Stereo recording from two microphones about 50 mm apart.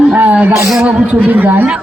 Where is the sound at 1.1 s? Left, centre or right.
Right.